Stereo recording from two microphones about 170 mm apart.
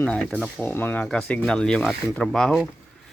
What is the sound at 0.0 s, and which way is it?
Speech, 5° left (ahead or behind).